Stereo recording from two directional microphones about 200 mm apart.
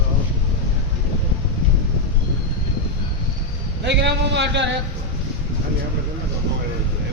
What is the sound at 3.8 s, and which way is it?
Speech, 60° right (ahead or behind).